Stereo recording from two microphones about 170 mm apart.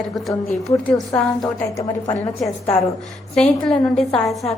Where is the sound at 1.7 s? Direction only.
20° left (ahead or behind).